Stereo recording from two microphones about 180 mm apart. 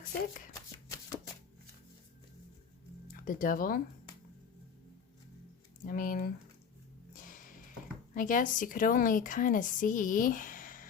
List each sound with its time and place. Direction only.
0.0 s speech: 50° left (ahead or behind)
3.1 s speech: 50° left (ahead or behind)
5.8 s a woman's voice: 50° left (ahead or behind)
7.1 s music: 45° left (ahead or behind)
8.1 s a woman's voice: 45° left (ahead or behind)